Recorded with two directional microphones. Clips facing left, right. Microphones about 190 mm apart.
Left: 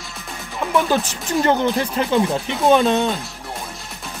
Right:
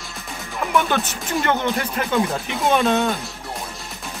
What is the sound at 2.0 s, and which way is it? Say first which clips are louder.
Speech: left 3 dB; 25° left (ahead or behind).